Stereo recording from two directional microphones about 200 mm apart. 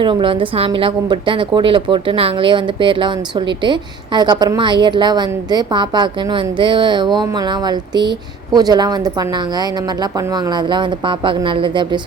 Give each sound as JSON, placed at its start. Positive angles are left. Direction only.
{"t": 0.0, "sound": "a woman's voice", "side_deg": -25}